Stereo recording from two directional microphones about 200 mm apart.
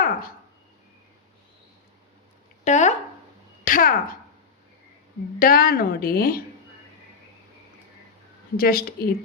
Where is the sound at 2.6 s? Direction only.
35° left (ahead or behind).